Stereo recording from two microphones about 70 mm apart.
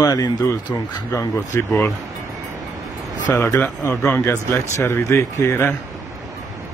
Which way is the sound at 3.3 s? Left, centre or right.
Left.